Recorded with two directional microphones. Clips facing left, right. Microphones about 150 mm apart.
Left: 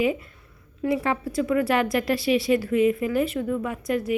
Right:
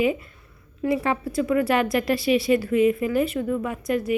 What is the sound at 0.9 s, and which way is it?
A woman's voice, 15° right (ahead or behind).